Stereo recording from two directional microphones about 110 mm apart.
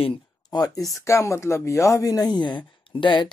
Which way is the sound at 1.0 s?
25° left (ahead or behind).